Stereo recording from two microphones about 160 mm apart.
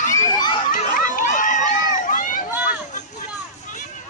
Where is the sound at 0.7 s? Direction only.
60° left (ahead or behind).